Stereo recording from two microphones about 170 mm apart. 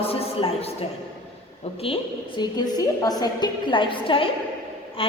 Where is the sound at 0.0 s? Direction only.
35° left (ahead or behind).